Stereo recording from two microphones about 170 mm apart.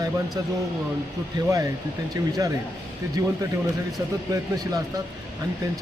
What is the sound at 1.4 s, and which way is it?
A man's voice, 20° right (ahead or behind).